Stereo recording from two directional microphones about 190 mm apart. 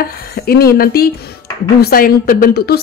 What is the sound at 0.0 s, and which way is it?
Speech, 50° left (ahead or behind).